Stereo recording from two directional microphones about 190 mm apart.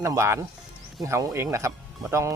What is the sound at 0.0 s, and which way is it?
Speech, 15° right (ahead or behind).